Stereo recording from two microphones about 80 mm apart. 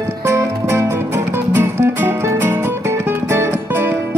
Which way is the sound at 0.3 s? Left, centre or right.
Right.